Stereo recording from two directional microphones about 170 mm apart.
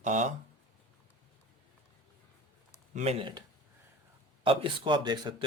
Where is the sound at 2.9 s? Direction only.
40° right (ahead or behind).